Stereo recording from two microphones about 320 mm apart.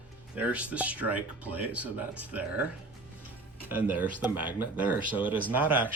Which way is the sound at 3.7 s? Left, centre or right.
Centre.